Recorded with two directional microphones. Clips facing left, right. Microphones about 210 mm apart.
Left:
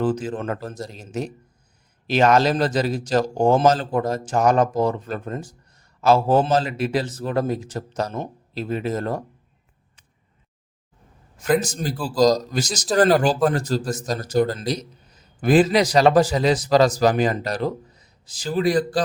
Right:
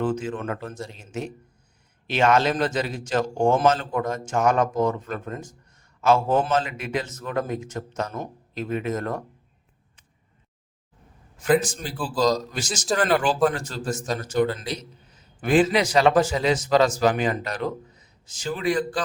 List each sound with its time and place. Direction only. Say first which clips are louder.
0.0 s a man's voice: left 3 dB; 35° left (ahead or behind)
11.6 s a man's voice: left 4 dB; 40° left (ahead or behind)